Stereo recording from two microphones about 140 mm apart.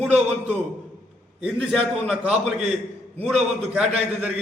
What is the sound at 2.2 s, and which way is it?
Speech, 50° right (ahead or behind).